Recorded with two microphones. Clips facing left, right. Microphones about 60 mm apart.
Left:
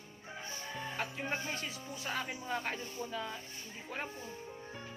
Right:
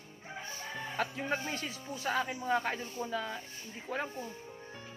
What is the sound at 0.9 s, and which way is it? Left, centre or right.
Speech, right.